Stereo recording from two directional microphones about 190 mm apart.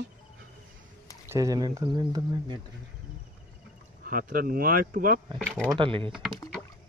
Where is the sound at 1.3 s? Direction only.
20° right (ahead or behind).